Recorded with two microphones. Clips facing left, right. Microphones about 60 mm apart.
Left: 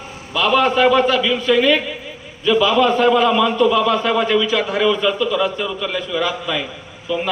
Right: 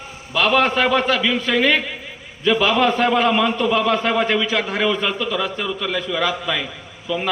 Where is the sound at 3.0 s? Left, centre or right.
Right.